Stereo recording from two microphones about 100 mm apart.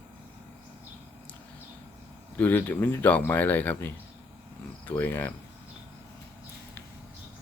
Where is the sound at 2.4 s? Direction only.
20° left (ahead or behind).